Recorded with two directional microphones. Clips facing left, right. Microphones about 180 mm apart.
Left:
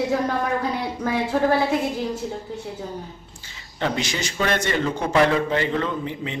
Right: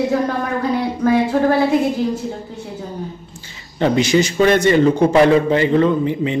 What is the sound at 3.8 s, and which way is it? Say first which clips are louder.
A man's voice: right 11 dB; 5° right (ahead or behind).